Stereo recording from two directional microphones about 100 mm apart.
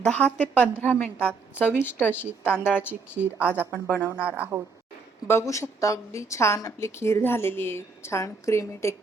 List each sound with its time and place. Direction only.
0.0 s a woman's voice: 15° left (ahead or behind)
3.2 s a woman's voice: 15° right (ahead or behind)
3.7 s a woman's voice: 15° left (ahead or behind)
4.2 s a woman's voice: 15° right (ahead or behind)
5.3 s a woman's voice: 30° left (ahead or behind)